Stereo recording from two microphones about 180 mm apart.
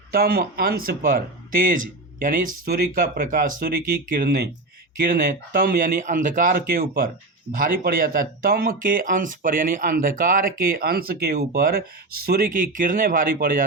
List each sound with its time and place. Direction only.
0.1 s speech: 55° right (ahead or behind)